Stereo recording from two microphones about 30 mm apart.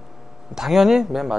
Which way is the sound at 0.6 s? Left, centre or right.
Centre.